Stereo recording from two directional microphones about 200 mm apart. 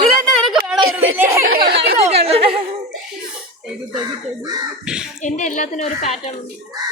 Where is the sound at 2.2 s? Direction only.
30° right (ahead or behind).